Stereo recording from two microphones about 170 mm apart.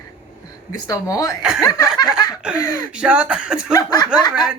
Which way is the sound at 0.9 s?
20° left (ahead or behind).